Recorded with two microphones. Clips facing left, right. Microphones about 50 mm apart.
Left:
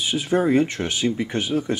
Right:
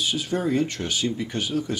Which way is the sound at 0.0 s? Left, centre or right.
Left.